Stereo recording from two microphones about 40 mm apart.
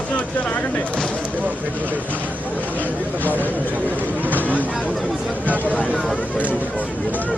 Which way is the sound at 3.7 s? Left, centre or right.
Right.